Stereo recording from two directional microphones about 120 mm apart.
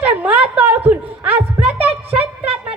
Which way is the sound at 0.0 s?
15° right (ahead or behind).